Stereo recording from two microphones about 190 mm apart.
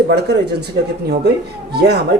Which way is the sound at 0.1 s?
60° right (ahead or behind).